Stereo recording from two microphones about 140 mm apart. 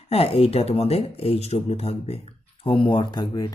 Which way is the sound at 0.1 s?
45° left (ahead or behind).